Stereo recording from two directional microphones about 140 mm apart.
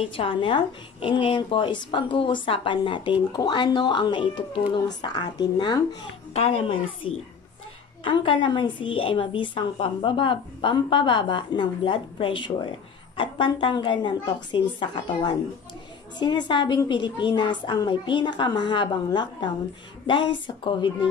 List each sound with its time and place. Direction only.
0.0 s a woman's voice: 40° left (ahead or behind)
6.3 s a woman's voice: 50° left (ahead or behind)